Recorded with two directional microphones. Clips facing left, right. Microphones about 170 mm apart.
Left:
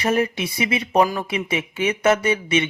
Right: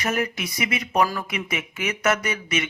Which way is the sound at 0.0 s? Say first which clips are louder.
Left 5 dB; 30° left (ahead or behind).